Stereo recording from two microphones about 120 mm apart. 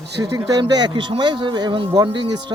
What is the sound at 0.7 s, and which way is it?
Speech, 40° right (ahead or behind).